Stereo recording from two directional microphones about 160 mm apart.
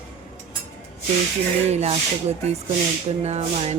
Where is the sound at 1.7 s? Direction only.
45° right (ahead or behind).